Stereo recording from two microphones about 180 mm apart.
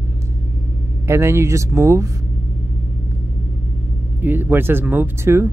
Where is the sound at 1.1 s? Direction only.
15° right (ahead or behind).